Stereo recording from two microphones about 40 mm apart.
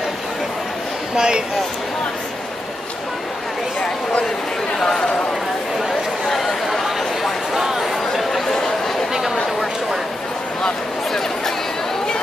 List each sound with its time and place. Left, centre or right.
1.1 s speech: centre
6.2 s chatter: centre
9.1 s a sound: centre